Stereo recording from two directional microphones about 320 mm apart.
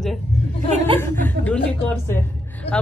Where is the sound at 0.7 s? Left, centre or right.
Right.